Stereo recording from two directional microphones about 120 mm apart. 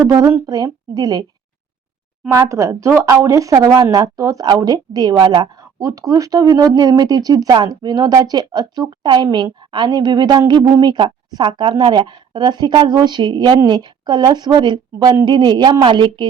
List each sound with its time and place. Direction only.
0.1 s a woman's voice: 25° right (ahead or behind)
2.3 s a woman's voice: 25° right (ahead or behind); by 16.2 s 40° right (ahead or behind)